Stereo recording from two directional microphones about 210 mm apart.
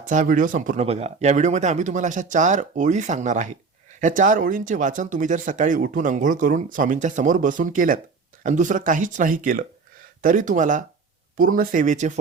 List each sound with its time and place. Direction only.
0.0 s speech: 40° right (ahead or behind)